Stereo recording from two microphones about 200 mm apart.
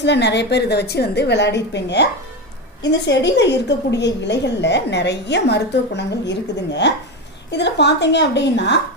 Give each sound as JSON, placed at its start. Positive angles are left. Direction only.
{"t": 0.0, "sound": "a woman's voice", "side_deg": 60}